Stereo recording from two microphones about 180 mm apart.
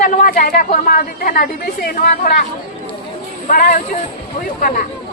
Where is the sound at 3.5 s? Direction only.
50° left (ahead or behind).